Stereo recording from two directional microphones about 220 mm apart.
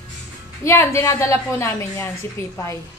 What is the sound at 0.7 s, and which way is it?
A woman's voice, 10° left (ahead or behind).